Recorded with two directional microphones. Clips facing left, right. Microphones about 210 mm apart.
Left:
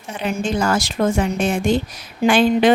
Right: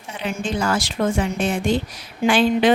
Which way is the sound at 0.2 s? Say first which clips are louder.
Left 3 dB; 45° left (ahead or behind).